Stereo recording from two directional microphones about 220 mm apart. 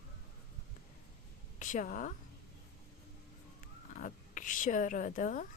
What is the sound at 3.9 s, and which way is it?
Speech, 35° left (ahead or behind).